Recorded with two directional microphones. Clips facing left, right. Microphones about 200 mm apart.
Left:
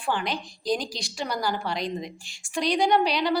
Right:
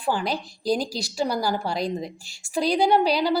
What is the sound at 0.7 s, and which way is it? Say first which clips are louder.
A woman's voice: right 3 dB; 40° right (ahead or behind).